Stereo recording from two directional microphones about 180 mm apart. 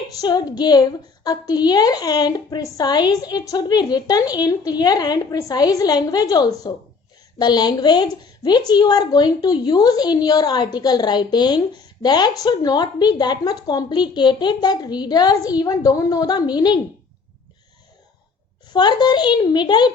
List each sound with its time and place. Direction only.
0.2 s speech: 20° left (ahead or behind)
18.7 s speech: 25° left (ahead or behind)